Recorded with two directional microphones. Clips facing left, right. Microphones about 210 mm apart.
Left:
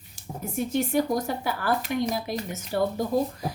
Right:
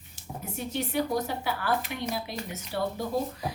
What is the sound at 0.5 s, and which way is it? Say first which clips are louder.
A woman's voice: left 6 dB; 45° left (ahead or behind).